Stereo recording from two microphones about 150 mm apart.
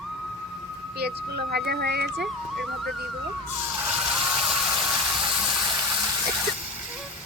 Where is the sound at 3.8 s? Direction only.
5° right (ahead or behind).